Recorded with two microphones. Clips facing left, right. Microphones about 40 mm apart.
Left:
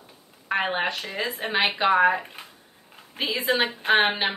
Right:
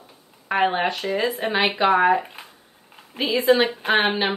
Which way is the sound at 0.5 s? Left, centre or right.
Centre.